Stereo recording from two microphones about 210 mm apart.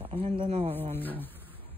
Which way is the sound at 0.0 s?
25° right (ahead or behind).